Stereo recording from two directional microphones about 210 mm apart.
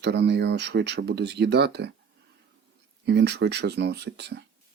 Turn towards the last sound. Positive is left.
turn(degrees=-55)  # may be behind; listen again after turning